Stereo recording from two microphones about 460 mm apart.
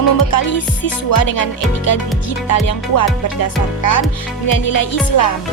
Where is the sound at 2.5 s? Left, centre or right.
Left.